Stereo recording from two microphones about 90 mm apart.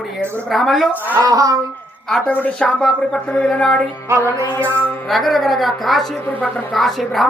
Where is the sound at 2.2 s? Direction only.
15° left (ahead or behind).